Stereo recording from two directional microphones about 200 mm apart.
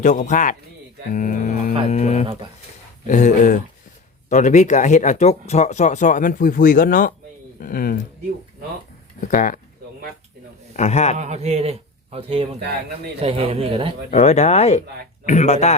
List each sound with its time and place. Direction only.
0.0 s speech: 40° left (ahead or behind)
9.3 s speech: 40° left (ahead or behind)
10.8 s speech: 35° left (ahead or behind)
11.2 s a man's voice: 35° right (ahead or behind)
14.1 s speech: 35° left (ahead or behind)